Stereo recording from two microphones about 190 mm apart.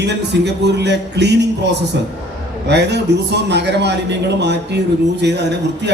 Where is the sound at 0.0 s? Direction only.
65° right (ahead or behind).